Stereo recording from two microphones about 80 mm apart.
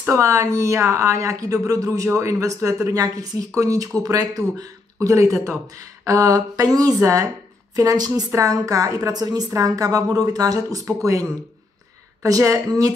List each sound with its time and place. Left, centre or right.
0.1 s a woman's voice: right